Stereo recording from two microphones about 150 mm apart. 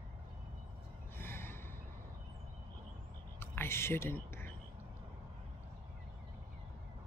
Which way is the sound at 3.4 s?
15° left (ahead or behind).